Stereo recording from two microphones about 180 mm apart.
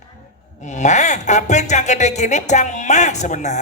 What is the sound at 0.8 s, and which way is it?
Speech, 40° left (ahead or behind).